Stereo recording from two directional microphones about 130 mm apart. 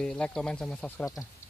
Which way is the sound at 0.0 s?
5° left (ahead or behind).